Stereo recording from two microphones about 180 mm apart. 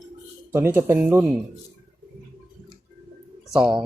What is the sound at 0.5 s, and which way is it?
Speech, 15° right (ahead or behind).